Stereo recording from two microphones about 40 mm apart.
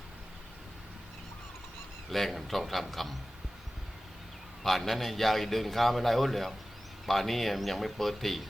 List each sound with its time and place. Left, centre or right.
2.0 s a man's voice: centre
4.6 s a man's voice: centre